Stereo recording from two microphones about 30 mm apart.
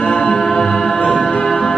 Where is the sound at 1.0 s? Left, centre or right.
Centre.